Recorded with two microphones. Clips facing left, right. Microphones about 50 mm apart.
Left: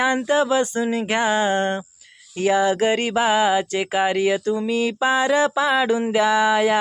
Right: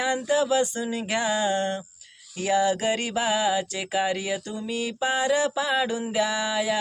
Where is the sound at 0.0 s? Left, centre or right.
Left.